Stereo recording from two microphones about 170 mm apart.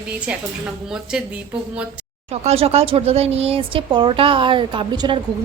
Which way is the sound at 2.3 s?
40° right (ahead or behind).